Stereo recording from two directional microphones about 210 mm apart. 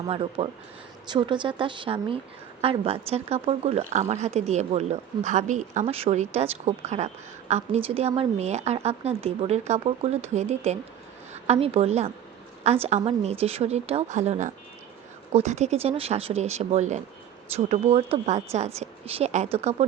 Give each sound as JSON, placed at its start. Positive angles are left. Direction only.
{"t": 0.1, "sound": "speech", "side_deg": -25}